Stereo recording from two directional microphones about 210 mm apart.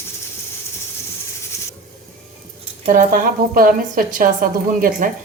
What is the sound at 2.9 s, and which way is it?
A woman's voice, 40° right (ahead or behind).